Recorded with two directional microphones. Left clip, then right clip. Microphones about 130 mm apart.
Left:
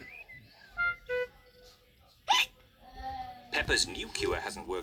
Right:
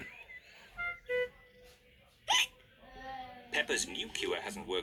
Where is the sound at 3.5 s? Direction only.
55° left (ahead or behind).